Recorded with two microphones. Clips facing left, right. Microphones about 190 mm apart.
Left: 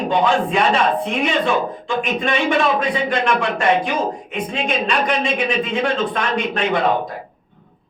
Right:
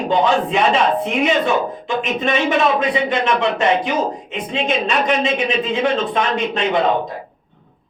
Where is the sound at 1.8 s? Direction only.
20° right (ahead or behind).